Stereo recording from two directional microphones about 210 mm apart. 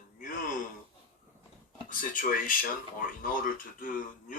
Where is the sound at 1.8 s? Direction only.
40° left (ahead or behind).